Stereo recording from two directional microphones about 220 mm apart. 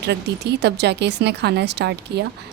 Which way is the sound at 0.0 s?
50° right (ahead or behind).